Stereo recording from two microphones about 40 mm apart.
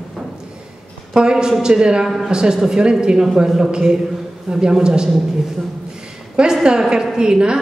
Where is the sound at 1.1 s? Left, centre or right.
Right.